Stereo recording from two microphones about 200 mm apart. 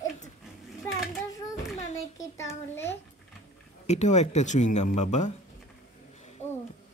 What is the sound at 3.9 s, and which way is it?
Speech, 35° left (ahead or behind).